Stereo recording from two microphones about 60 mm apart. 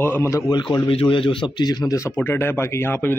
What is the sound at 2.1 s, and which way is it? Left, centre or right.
A man's voice, left.